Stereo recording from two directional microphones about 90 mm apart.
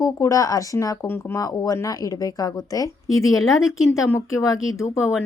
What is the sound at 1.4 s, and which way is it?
A woman's voice, 45° left (ahead or behind).